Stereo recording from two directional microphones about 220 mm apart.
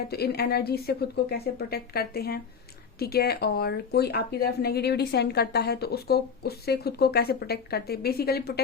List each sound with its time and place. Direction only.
0.1 s speech: 45° left (ahead or behind)